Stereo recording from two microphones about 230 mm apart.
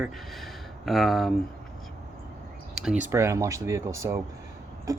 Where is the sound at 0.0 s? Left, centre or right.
Centre.